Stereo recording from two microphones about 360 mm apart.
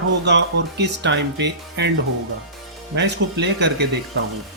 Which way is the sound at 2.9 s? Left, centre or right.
Right.